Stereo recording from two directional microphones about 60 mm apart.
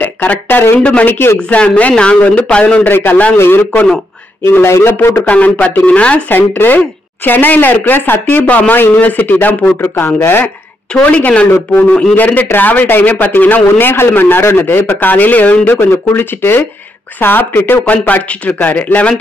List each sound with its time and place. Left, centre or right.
0.0 s speech: left
1.5 s a man's voice: left
5.2 s a man's voice: left
10.9 s a man's voice: left
15.8 s a man's voice: left